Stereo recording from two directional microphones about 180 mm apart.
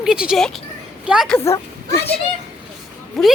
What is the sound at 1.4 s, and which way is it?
Speech, 15° left (ahead or behind).